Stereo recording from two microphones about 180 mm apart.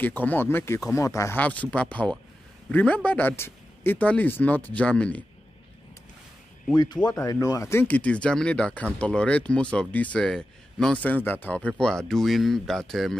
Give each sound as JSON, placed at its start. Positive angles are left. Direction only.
{"t": 0.0, "sound": "speech", "side_deg": 10}
{"t": 6.7, "sound": "speech", "side_deg": 25}